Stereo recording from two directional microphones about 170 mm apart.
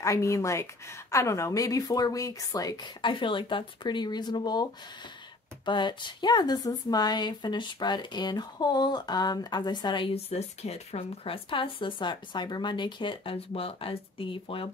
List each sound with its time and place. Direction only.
0.0 s a woman's voice: 20° left (ahead or behind)
5.7 s a woman's voice: 25° left (ahead or behind)